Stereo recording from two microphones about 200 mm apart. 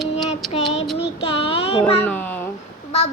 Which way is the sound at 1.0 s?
30° left (ahead or behind).